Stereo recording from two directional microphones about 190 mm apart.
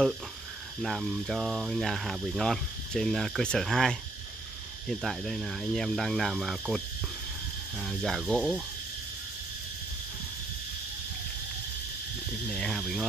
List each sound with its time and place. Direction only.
0.8 s speech: centre (ahead or behind)
7.8 s speech: centre (ahead or behind)
12.4 s speech: 5° left (ahead or behind)